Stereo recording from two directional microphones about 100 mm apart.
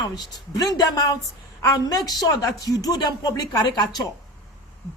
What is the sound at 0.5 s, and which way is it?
A woman's voice, 40° left (ahead or behind).